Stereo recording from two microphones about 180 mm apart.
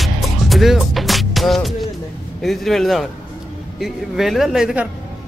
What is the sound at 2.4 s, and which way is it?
Speech, centre (ahead or behind).